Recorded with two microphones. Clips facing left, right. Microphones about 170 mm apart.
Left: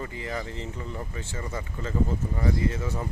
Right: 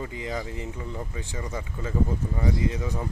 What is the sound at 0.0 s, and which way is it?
Speech, 15° right (ahead or behind).